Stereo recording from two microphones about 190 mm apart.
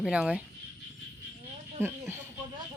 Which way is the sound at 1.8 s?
10° right (ahead or behind).